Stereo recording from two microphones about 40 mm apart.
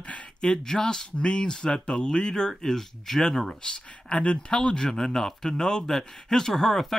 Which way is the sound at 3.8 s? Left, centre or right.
Left.